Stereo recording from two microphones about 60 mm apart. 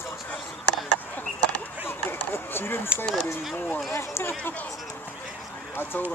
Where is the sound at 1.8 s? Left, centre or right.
Left.